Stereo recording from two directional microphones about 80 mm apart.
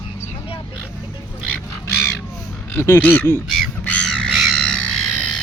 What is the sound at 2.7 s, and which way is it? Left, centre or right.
Speech, left.